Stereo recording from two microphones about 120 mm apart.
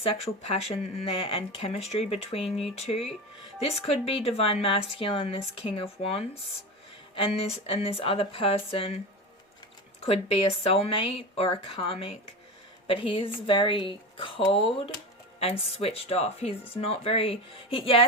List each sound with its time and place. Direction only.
0.0 s a woman's voice: 55° left (ahead or behind)
10.0 s a woman's voice: 55° left (ahead or behind)